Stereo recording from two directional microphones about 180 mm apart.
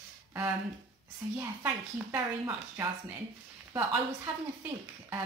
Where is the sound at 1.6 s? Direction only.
15° right (ahead or behind).